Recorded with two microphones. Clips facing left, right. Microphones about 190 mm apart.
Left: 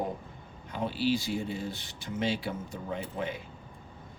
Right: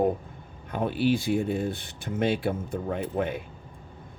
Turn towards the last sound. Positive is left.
turn(degrees=-55)  # may be behind; listen again after turning